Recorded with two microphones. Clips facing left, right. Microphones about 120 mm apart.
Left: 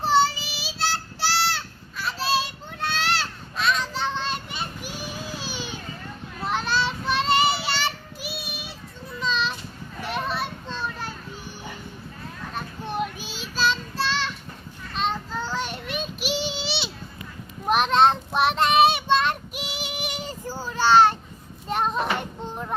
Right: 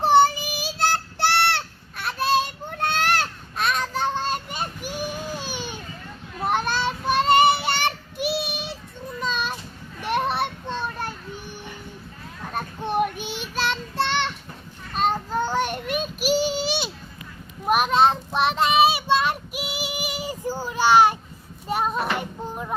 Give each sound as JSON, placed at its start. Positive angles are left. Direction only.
{"t": 0.0, "sound": "child singing", "side_deg": -55}
{"t": 9.2, "sound": "a sound", "side_deg": -50}
{"t": 10.0, "sound": "children playing", "side_deg": -60}
{"t": 12.9, "sound": "child singing", "side_deg": -60}
{"t": 14.9, "sound": "child singing", "side_deg": -45}
{"t": 17.7, "sound": "child singing", "side_deg": -5}
{"t": 20.4, "sound": "child singing", "side_deg": -15}